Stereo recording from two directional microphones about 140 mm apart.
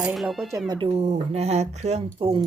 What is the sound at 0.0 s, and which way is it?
Speech, centre (ahead or behind).